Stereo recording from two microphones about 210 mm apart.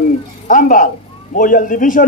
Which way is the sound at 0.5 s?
40° left (ahead or behind).